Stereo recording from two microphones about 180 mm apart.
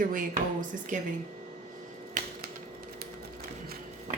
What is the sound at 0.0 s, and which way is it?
Speech, 50° right (ahead or behind).